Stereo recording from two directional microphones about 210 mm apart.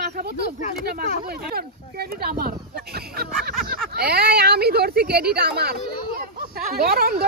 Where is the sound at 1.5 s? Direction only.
45° right (ahead or behind).